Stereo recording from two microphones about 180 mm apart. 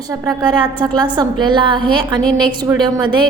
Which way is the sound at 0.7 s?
25° right (ahead or behind).